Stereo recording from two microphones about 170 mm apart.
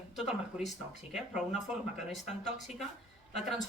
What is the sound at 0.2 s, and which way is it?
Speech, centre (ahead or behind).